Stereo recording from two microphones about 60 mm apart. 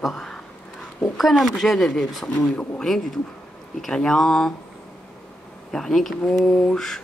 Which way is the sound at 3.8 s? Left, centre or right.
Centre.